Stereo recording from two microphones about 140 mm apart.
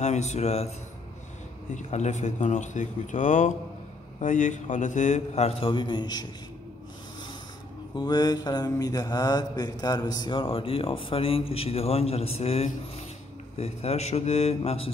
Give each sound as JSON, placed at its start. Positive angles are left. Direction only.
{"t": 0.0, "sound": "speech", "side_deg": 55}
{"t": 1.8, "sound": "a man's voice", "side_deg": 60}
{"t": 7.9, "sound": "mantra", "side_deg": 30}
{"t": 13.6, "sound": "speech", "side_deg": 50}